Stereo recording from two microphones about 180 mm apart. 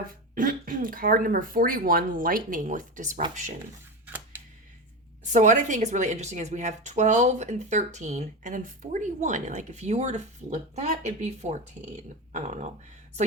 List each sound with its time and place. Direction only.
0.1 s speech: 50° right (ahead or behind)
4.0 s camera: 10° right (ahead or behind)
5.2 s speech: 40° right (ahead or behind)